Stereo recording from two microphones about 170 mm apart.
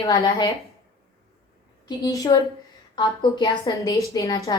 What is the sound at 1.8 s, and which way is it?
A woman's voice, 20° left (ahead or behind).